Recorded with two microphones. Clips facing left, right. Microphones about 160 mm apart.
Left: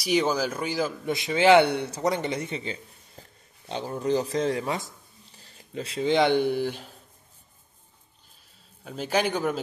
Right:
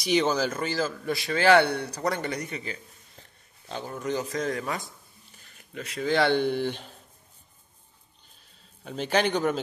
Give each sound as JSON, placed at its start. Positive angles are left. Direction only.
{"t": 0.0, "sound": "speech", "side_deg": 5}
{"t": 8.8, "sound": "a man's voice", "side_deg": 5}